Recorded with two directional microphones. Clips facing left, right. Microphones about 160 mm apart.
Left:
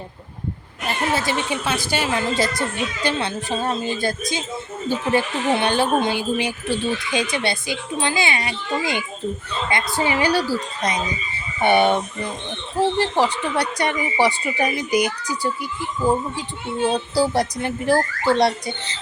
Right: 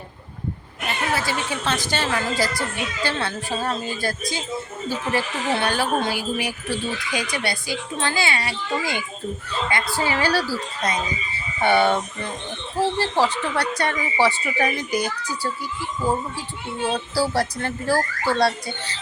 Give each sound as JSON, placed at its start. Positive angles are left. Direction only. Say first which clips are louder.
{"t": 1.1, "sound": "speech", "louder": "left 2 dB", "side_deg": 20}
{"t": 16.8, "sound": "speech", "louder": "left 3 dB", "side_deg": 20}